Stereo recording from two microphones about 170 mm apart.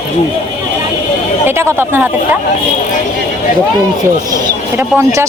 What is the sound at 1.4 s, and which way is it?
Speech, 15° right (ahead or behind).